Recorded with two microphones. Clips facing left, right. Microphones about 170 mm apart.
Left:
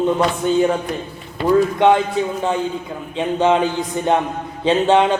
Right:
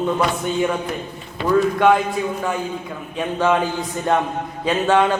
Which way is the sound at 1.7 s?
25° left (ahead or behind).